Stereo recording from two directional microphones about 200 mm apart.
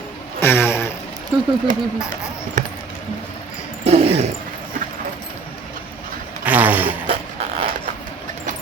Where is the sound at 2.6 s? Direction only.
40° right (ahead or behind).